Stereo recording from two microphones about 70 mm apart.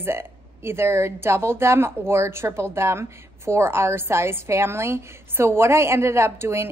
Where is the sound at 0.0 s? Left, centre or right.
Right.